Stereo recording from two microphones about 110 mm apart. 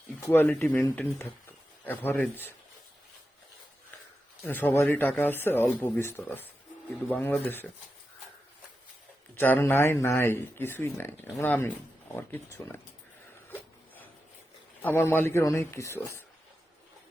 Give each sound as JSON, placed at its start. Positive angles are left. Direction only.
{"t": 0.3, "sound": "speech", "side_deg": 20}
{"t": 4.4, "sound": "speech", "side_deg": 15}
{"t": 9.3, "sound": "speech", "side_deg": 15}
{"t": 13.5, "sound": "a sound", "side_deg": 15}
{"t": 14.8, "sound": "speech", "side_deg": 20}